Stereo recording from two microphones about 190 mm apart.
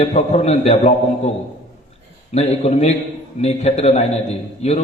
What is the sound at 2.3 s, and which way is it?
A man's voice, 35° left (ahead or behind).